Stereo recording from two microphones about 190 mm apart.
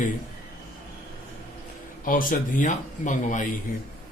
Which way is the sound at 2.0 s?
45° left (ahead or behind).